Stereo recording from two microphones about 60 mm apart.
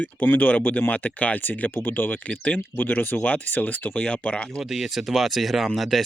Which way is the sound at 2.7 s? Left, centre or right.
Left.